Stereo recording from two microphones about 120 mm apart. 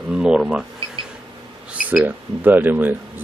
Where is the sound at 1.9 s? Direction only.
15° right (ahead or behind).